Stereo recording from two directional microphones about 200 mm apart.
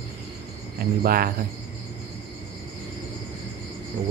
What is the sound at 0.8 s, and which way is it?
Speech, 45° right (ahead or behind).